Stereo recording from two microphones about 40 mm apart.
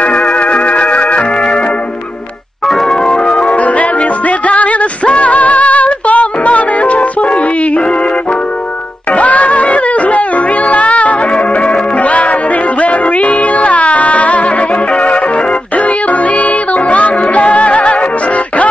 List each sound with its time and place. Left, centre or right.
0.0 s music: left
2.7 s organ: centre
3.3 s music: left
9.1 s music: left